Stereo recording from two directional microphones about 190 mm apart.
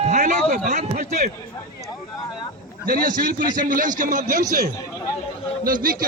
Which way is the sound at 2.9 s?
45° right (ahead or behind).